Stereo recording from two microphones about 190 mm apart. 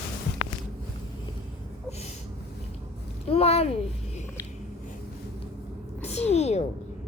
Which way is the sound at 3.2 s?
30° left (ahead or behind).